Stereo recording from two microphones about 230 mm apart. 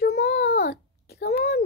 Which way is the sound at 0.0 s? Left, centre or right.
Left.